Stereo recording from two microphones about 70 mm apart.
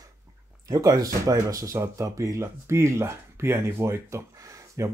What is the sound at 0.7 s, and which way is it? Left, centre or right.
Speech, right.